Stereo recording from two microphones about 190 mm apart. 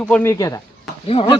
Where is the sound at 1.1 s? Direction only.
30° left (ahead or behind).